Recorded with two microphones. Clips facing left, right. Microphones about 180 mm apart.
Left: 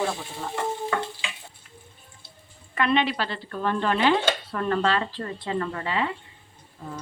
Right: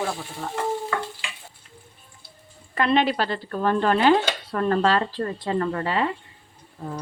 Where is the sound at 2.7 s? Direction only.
35° right (ahead or behind).